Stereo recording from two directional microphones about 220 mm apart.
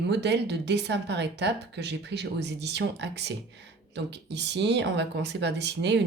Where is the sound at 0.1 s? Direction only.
50° right (ahead or behind).